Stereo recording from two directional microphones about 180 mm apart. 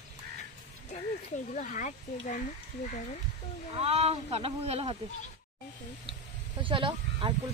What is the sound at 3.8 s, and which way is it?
Speech, 35° right (ahead or behind).